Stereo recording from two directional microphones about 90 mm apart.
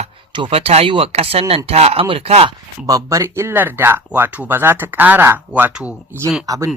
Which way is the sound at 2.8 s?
40° right (ahead or behind).